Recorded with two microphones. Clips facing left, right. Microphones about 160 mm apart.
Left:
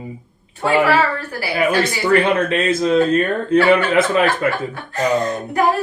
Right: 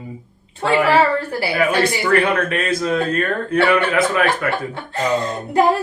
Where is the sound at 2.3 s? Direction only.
25° left (ahead or behind).